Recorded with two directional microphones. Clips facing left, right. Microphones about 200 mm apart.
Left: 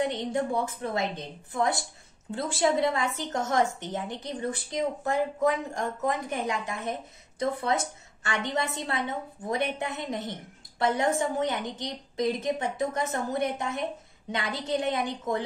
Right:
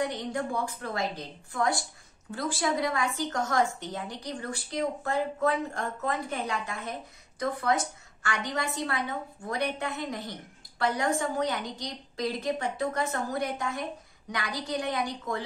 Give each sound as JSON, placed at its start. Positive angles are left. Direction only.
{"t": 0.0, "sound": "speech", "side_deg": 25}